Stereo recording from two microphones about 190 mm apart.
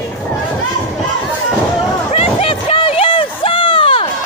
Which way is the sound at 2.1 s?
30° left (ahead or behind).